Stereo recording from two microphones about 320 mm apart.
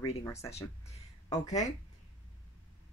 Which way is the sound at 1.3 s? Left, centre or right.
Left.